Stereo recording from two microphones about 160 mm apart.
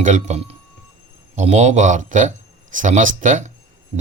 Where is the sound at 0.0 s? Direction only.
50° right (ahead or behind).